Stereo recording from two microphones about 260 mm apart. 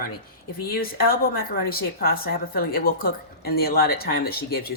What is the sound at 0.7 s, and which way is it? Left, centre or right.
A woman's voice, left.